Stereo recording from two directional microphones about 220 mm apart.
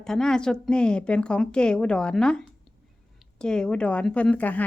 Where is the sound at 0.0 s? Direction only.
Centre (ahead or behind).